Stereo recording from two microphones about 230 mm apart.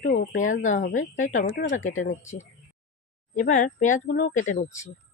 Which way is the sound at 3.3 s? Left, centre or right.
Left.